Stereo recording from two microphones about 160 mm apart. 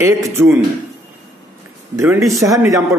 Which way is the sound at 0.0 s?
15° right (ahead or behind).